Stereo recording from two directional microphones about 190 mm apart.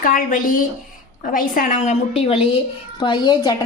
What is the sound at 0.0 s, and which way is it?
A woman's voice, 45° left (ahead or behind).